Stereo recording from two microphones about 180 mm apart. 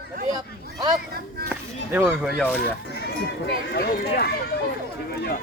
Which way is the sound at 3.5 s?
60° left (ahead or behind).